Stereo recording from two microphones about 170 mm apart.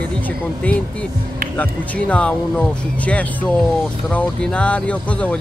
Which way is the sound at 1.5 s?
10° left (ahead or behind).